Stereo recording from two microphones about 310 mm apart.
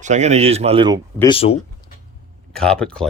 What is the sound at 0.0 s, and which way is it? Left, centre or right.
Speech, right.